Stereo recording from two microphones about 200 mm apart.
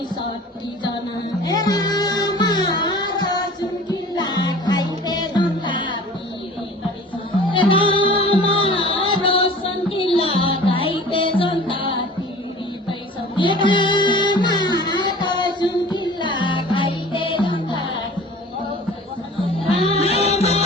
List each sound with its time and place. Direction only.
1.5 s music: 20° left (ahead or behind)
7.5 s music: 25° left (ahead or behind)
12.9 s music: 25° left (ahead or behind)
19.7 s music: 30° left (ahead or behind)